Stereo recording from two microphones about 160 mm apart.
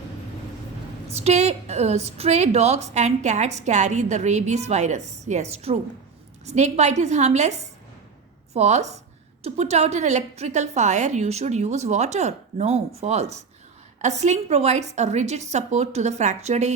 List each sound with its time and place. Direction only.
1.2 s a woman's voice: 40° right (ahead or behind)